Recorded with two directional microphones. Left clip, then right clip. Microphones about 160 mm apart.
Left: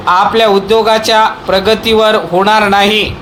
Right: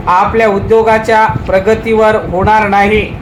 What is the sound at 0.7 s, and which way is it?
A man's voice, 40° left (ahead or behind).